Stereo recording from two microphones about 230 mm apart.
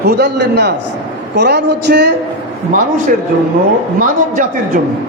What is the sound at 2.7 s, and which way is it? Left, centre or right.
A man's voice, right.